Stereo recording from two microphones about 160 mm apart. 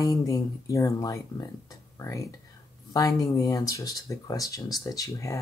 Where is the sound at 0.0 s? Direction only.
20° left (ahead or behind).